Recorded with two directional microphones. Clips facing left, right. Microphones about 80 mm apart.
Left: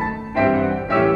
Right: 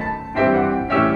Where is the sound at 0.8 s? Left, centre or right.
Centre.